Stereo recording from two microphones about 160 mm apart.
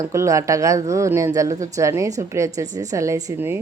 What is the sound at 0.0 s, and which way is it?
A woman's voice, 20° right (ahead or behind).